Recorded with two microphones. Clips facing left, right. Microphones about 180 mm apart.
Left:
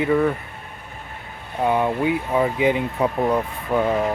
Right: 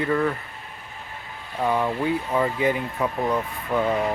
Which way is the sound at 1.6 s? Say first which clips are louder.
Left 3 dB; 20° left (ahead or behind).